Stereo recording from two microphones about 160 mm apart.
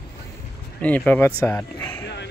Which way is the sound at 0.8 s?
10° left (ahead or behind).